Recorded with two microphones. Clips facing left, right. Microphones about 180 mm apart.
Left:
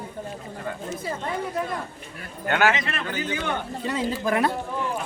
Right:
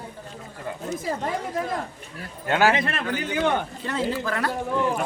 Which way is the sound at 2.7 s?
55° right (ahead or behind).